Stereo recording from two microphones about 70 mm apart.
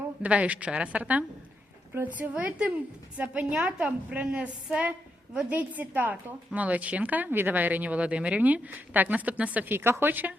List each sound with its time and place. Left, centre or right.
0.2 s a woman's voice: centre
9.7 s a woman's voice: right